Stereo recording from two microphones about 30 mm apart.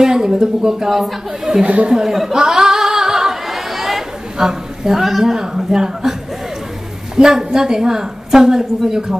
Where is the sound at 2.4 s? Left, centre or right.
Centre.